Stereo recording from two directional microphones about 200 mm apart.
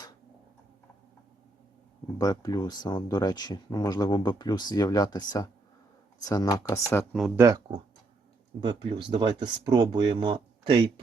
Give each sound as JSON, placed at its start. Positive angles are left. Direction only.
{"t": 2.1, "sound": "speech", "side_deg": 20}
{"t": 7.1, "sound": "speech", "side_deg": 0}
{"t": 7.3, "sound": "speech", "side_deg": -15}
{"t": 8.6, "sound": "speech", "side_deg": -20}